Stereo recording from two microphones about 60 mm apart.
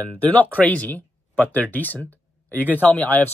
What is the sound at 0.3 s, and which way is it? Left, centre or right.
Speech, left.